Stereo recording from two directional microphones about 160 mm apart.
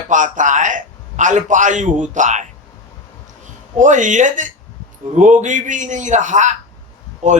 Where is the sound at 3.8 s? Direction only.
50° right (ahead or behind).